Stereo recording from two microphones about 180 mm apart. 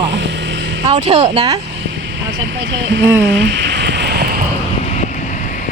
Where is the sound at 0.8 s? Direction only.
35° right (ahead or behind).